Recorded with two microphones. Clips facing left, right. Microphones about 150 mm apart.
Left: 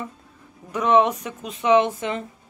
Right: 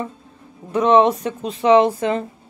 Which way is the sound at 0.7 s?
30° right (ahead or behind).